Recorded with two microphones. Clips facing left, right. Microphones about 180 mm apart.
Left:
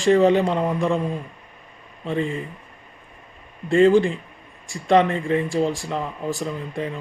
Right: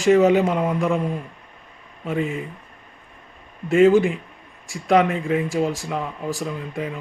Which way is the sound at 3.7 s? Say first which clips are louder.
Right 1 dB; 5° right (ahead or behind).